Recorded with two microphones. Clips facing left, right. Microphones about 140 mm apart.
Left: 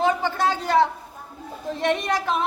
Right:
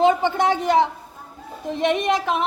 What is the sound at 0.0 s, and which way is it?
Speech, 20° right (ahead or behind).